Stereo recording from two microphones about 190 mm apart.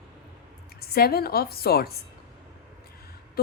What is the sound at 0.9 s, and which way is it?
Speech, 55° left (ahead or behind).